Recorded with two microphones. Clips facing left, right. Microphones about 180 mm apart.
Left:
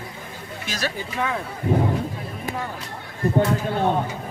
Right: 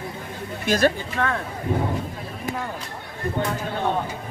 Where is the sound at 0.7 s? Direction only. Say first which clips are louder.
Right 10 dB; 55° right (ahead or behind).